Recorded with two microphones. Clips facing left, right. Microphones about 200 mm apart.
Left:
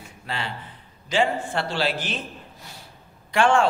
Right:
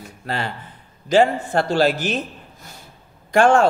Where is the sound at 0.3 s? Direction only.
40° right (ahead or behind).